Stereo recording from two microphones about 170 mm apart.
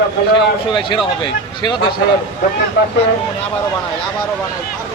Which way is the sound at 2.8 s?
75° left (ahead or behind).